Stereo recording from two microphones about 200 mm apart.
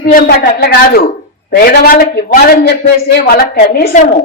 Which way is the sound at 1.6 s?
50° left (ahead or behind).